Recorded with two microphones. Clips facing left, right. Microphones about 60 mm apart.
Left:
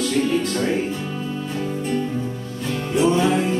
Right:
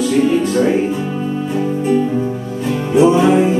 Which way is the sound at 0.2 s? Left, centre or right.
Centre.